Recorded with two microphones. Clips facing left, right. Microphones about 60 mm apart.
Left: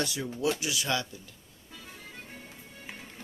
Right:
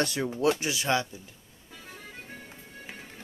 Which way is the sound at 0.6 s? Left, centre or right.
Right.